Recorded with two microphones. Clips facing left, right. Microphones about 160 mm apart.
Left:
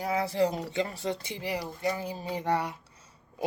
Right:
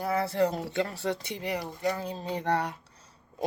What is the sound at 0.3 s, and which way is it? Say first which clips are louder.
Speech: even; 10° left (ahead or behind).